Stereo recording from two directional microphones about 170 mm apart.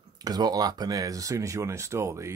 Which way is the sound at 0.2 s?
25° right (ahead or behind).